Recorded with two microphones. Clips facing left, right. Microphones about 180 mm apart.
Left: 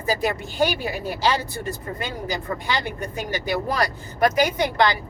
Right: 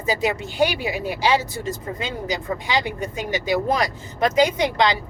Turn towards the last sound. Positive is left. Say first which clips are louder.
# right 1 dB
turn(degrees=-20)  # may be behind; listen again after turning